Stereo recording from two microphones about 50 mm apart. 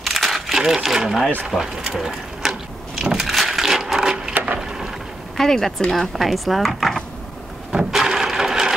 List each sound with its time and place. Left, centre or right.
0.0 s crumpling: centre
0.8 s speech: centre
3.2 s a sound: centre
4.3 s wood: right
5.4 s speech: centre
7.7 s a sound: centre